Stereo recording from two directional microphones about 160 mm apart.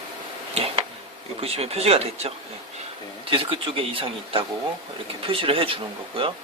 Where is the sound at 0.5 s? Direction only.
40° right (ahead or behind).